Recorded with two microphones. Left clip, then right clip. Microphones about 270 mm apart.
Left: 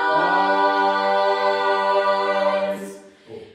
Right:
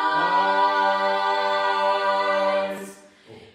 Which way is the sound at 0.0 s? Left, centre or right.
Centre.